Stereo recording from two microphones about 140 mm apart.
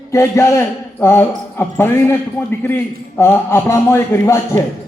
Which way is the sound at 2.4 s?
5° left (ahead or behind).